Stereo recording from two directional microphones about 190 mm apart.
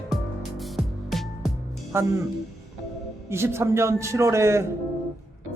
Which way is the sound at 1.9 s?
10° right (ahead or behind).